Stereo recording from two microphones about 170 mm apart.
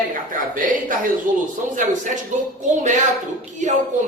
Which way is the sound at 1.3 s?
50° right (ahead or behind).